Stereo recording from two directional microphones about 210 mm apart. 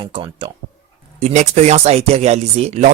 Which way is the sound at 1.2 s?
35° right (ahead or behind).